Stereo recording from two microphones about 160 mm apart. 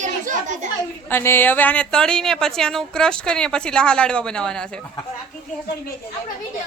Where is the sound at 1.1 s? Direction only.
15° left (ahead or behind).